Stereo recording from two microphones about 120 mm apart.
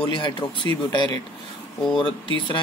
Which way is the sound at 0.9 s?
40° left (ahead or behind).